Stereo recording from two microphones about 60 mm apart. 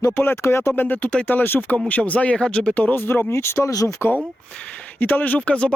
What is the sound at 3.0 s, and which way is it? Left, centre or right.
Speech, left.